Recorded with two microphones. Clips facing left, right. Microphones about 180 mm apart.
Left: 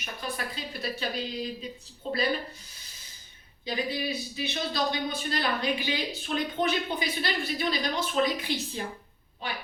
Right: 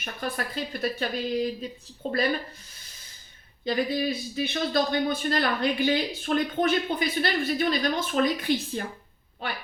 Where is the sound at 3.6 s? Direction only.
55° right (ahead or behind).